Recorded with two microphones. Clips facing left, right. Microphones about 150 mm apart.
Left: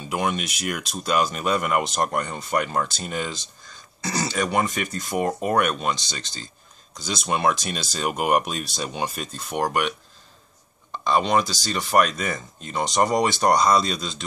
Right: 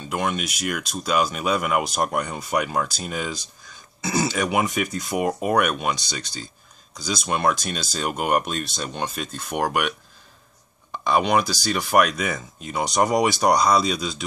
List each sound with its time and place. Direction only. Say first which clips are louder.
0.0 s speech: even; centre (ahead or behind)
11.1 s speech: right 1 dB; 5° right (ahead or behind)